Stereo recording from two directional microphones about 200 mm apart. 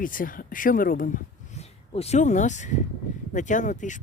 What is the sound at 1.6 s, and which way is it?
Speech, 30° left (ahead or behind).